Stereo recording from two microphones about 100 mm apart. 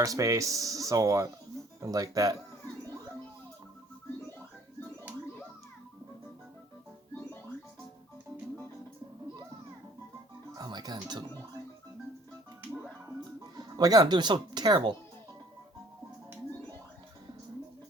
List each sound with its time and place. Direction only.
0.0 s speech: 35° right (ahead or behind)
10.5 s music: 45° right (ahead or behind)
13.6 s speech: 40° right (ahead or behind)